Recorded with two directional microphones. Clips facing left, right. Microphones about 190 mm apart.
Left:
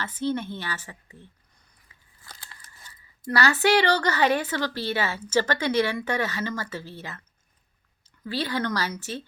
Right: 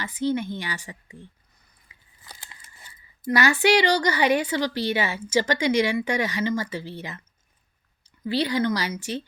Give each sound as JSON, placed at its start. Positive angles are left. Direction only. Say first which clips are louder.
{"t": 0.0, "sound": "a woman's voice", "louder": "right 2 dB", "side_deg": -10}
{"t": 8.2, "sound": "a woman's voice", "louder": "right 5 dB", "side_deg": -15}